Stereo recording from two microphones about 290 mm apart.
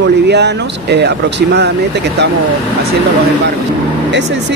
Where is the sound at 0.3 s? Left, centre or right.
Right.